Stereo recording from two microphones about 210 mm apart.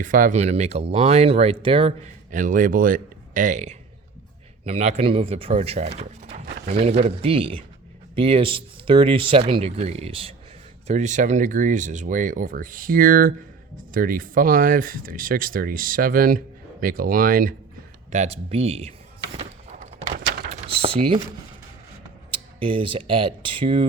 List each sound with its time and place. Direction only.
0.0 s speech: 40° right (ahead or behind)
2.3 s speech: 40° right (ahead or behind)
18.1 s a sound: 30° right (ahead or behind)
20.7 s typing: 25° right (ahead or behind)
22.3 s speech: 25° right (ahead or behind)